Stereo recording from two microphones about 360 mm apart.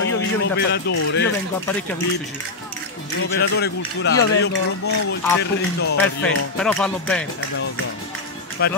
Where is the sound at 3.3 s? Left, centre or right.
Left.